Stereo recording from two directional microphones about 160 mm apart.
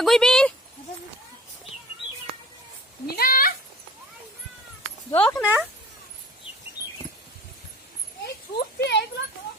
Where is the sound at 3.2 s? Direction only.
65° left (ahead or behind).